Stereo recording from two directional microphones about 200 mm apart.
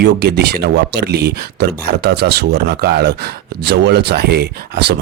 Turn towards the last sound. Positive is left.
turn(degrees=-55)  # may be behind; listen again after turning